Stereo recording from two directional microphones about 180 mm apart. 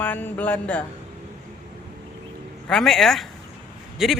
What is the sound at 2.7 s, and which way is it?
Speech, centre (ahead or behind).